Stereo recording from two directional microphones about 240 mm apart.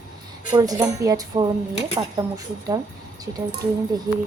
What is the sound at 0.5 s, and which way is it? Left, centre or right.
Speech, centre.